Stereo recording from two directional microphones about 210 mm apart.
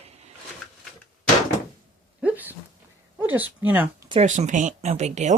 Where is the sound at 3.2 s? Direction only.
10° right (ahead or behind).